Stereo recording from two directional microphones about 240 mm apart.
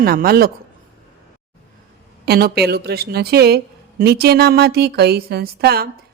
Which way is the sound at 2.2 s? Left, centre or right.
Right.